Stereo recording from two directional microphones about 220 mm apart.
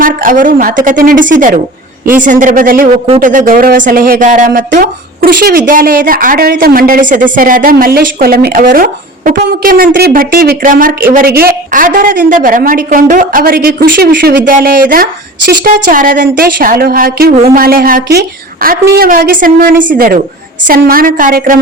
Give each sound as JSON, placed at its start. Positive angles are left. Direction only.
{"t": 0.0, "sound": "speech", "side_deg": -40}
{"t": 17.3, "sound": "speech", "side_deg": -30}
{"t": 17.6, "sound": "speech", "side_deg": -40}